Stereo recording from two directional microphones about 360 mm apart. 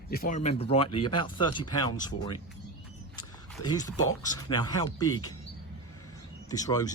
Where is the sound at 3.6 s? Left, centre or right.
Centre.